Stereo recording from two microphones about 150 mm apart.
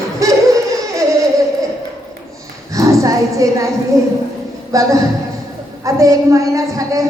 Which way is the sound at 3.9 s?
20° right (ahead or behind).